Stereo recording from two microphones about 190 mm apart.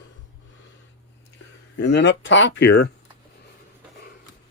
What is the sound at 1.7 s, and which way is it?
Speech, 65° left (ahead or behind).